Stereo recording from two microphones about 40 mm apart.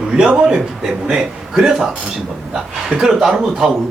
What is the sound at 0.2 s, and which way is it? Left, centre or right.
A man's voice, right.